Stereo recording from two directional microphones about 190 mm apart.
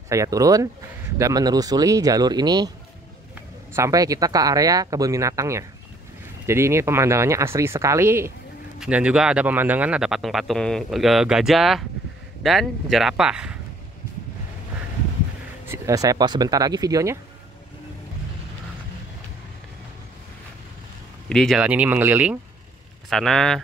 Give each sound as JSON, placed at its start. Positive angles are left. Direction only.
{"t": 0.1, "sound": "speech", "side_deg": -15}
{"t": 3.7, "sound": "speech", "side_deg": -15}
{"t": 15.7, "sound": "speech", "side_deg": -15}
{"t": 21.3, "sound": "speech", "side_deg": 0}